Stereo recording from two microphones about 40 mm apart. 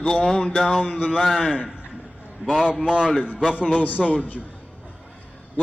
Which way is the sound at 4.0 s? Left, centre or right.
Centre.